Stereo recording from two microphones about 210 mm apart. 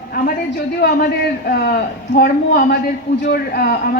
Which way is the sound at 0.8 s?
50° left (ahead or behind).